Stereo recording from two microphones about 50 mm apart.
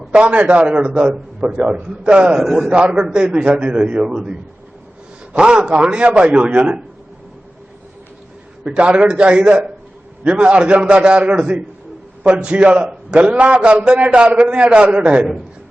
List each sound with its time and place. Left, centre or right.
0.3 s a man's voice: right
2.4 s a man's voice: centre
2.6 s a man's voice: right
5.4 s a man's voice: centre
8.6 s a man's voice: right